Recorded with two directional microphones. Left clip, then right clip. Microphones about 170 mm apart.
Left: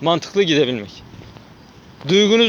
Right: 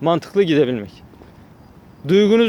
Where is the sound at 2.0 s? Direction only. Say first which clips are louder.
Even; 25° right (ahead or behind).